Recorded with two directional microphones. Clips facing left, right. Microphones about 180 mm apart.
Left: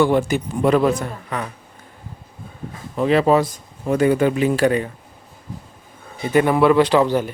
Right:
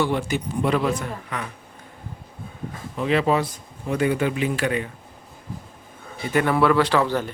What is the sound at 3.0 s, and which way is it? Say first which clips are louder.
Speech: left 5 dB; 40° left (ahead or behind).